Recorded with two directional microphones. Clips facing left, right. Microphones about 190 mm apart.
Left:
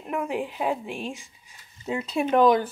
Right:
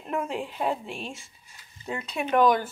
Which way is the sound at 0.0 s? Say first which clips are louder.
Left 1 dB; 5° left (ahead or behind).